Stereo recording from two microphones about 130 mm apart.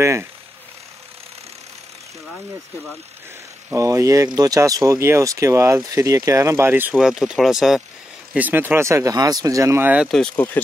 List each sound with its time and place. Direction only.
0.0 s speech: 20° right (ahead or behind)
3.7 s speech: 25° right (ahead or behind)
7.0 s speech: 5° right (ahead or behind)
10.1 s speech: 10° left (ahead or behind)